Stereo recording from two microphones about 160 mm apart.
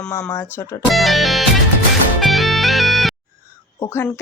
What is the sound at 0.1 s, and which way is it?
Speech, 20° left (ahead or behind).